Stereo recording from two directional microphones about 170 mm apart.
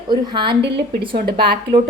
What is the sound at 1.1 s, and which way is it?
Speech, 50° right (ahead or behind).